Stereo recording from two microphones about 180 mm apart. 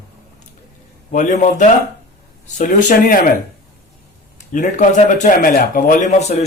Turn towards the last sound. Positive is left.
turn(degrees=40)  # may be behind; listen again after turning